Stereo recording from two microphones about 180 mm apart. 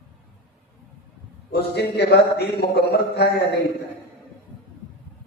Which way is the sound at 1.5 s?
65° left (ahead or behind).